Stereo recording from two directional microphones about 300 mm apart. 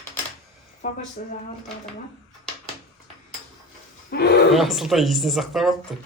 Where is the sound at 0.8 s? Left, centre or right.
Left.